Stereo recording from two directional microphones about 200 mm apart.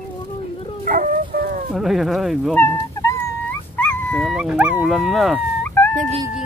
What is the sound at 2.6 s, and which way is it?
Dog, 15° left (ahead or behind).